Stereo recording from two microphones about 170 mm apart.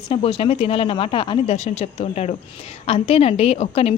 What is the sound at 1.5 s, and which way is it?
A woman's voice, 40° left (ahead or behind).